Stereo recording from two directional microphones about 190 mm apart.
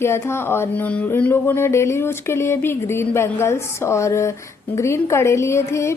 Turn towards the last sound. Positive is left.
turn(degrees=15)  # may be behind; listen again after turning